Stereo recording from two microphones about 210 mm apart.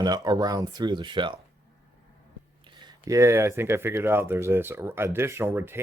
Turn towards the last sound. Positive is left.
turn(degrees=-10)  # may be behind; listen again after turning